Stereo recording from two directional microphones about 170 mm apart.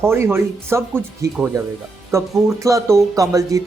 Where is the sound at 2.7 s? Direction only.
20° right (ahead or behind).